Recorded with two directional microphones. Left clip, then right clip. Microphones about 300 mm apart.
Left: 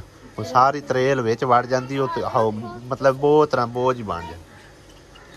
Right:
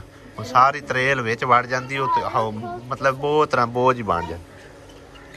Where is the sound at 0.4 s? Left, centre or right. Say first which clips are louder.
Right 1 dB; centre.